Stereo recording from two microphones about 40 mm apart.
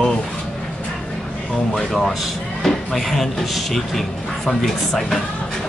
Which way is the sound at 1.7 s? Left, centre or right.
Centre.